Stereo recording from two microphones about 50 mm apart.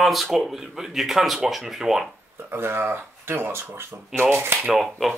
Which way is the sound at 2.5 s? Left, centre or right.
Right.